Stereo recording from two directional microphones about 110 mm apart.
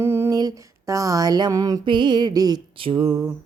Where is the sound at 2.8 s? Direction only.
55° right (ahead or behind).